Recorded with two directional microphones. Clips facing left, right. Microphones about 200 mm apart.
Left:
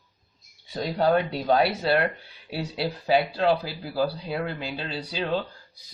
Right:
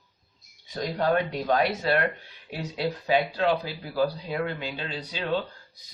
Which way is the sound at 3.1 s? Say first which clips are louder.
Left 2 dB; 35° left (ahead or behind).